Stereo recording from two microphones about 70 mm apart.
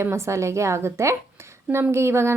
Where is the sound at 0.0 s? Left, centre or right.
Right.